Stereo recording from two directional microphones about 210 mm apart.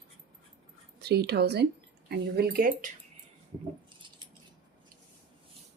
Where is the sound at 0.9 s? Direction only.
50° right (ahead or behind).